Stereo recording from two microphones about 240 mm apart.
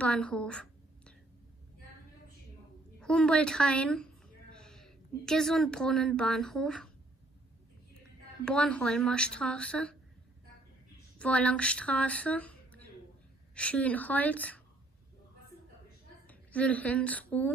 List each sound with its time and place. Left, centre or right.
0.0 s a woman's voice: centre
3.0 s a woman's voice: centre
8.5 s speech: centre
11.1 s a woman's voice: centre
16.3 s a woman's voice: centre